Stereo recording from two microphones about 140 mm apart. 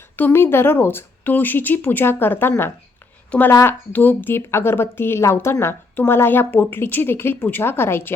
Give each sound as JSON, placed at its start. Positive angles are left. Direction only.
{"t": 0.2, "sound": "speech", "side_deg": 15}